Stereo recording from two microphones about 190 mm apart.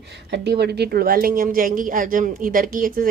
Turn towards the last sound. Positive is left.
turn(degrees=-45)  # may be behind; listen again after turning